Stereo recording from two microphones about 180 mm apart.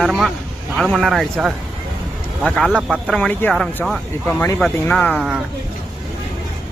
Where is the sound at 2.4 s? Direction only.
5° left (ahead or behind).